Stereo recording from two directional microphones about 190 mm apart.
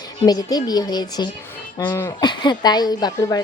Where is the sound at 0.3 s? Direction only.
20° left (ahead or behind).